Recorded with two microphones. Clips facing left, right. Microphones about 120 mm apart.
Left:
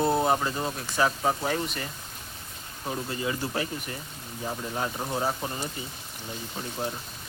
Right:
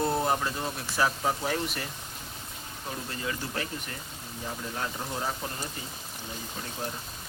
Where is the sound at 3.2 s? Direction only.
15° left (ahead or behind).